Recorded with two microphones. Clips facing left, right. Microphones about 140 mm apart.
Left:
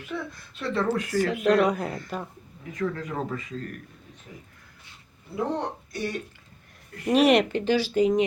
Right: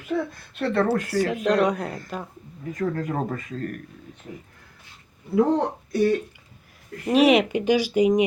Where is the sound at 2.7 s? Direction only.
45° right (ahead or behind).